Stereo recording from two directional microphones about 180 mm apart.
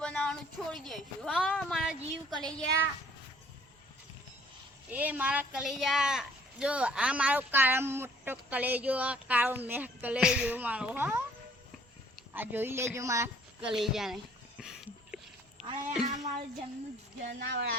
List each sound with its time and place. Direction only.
0.0 s speech: 5° left (ahead or behind)
4.9 s speech: 10° right (ahead or behind)
12.3 s speech: 10° right (ahead or behind)
13.7 s speech: centre (ahead or behind)
14.6 s a sound: 5° right (ahead or behind)
17.2 s speech: 80° right